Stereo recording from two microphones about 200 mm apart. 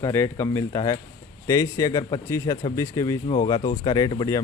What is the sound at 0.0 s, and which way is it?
Speech, 15° left (ahead or behind).